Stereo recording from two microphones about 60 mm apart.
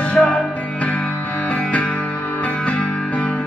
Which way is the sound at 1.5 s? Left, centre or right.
Centre.